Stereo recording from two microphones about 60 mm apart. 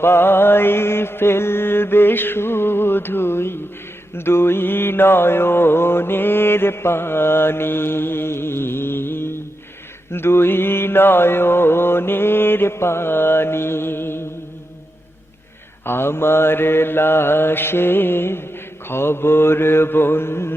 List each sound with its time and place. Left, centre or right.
0.0 s mantra: left
15.8 s mantra: left